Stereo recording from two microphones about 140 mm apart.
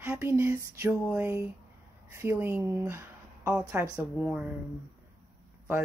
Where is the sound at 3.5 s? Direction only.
10° right (ahead or behind).